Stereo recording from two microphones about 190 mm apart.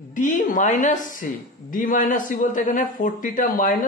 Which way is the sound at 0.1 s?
40° left (ahead or behind).